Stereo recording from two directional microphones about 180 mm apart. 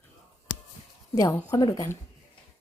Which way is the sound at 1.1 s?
20° left (ahead or behind).